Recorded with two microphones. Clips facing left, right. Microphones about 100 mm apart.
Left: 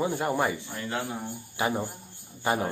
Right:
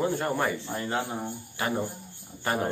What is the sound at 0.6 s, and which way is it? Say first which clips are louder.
Speech: right 3 dB; 30° right (ahead or behind).